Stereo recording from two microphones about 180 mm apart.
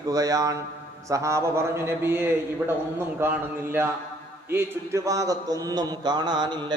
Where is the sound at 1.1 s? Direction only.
15° right (ahead or behind).